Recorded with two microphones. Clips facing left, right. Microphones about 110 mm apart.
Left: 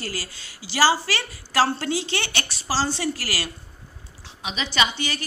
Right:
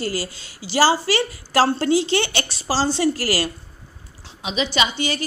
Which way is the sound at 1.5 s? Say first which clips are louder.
Right 5 dB; 35° right (ahead or behind).